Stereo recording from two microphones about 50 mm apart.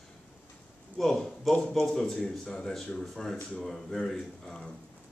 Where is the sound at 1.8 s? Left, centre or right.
Centre.